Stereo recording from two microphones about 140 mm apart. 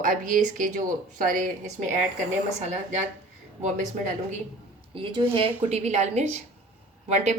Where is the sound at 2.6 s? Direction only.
55° right (ahead or behind).